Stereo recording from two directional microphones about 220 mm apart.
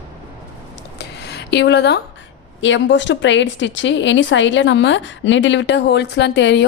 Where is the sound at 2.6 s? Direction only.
55° left (ahead or behind).